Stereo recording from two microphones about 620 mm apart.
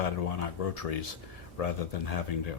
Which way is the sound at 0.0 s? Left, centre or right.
Left.